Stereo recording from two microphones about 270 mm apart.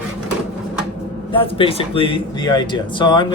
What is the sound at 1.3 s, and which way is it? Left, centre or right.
Speech, centre.